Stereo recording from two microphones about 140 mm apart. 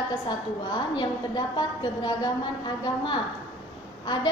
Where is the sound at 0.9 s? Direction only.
30° left (ahead or behind).